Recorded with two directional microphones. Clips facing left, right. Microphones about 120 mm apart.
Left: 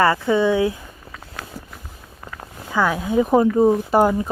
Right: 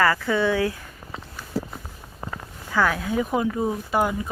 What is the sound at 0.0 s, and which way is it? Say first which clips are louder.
Speech: left 4 dB; 20° left (ahead or behind).